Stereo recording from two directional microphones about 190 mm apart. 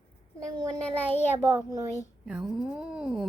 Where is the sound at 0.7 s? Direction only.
5° left (ahead or behind).